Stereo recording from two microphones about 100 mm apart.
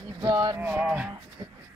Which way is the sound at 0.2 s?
40° right (ahead or behind).